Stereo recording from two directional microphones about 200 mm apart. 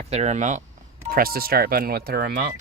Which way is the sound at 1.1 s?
50° right (ahead or behind).